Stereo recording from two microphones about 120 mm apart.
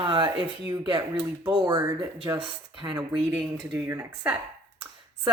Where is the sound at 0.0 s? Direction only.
40° right (ahead or behind).